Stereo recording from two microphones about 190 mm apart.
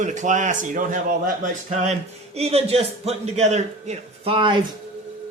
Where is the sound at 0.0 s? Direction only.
40° right (ahead or behind).